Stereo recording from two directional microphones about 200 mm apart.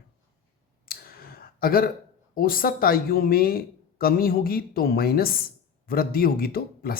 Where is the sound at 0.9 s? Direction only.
50° left (ahead or behind).